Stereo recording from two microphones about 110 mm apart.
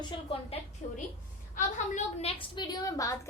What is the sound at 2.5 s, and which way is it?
Speech, 40° left (ahead or behind).